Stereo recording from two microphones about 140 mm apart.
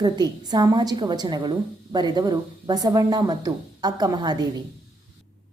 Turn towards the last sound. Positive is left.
turn(degrees=-30)  # may be behind; listen again after turning